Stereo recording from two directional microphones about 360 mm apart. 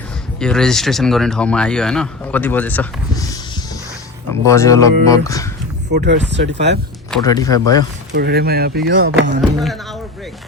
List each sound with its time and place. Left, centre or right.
0.3 s speech: centre
4.5 s speech: centre
5.9 s speech: right
7.1 s speech: centre
8.1 s speech: right
9.6 s speech: centre